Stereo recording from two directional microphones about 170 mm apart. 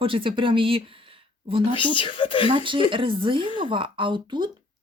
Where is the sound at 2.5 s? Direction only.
30° right (ahead or behind).